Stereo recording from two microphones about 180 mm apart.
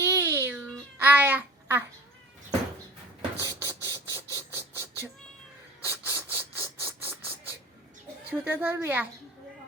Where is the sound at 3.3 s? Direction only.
15° right (ahead or behind).